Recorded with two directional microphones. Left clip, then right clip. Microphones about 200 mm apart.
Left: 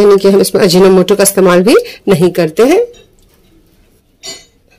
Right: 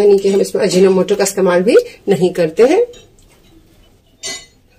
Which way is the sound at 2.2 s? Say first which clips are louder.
Left 1 dB; 40° left (ahead or behind).